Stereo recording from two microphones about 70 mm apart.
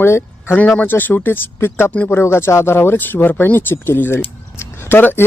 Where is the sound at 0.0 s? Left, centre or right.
Left.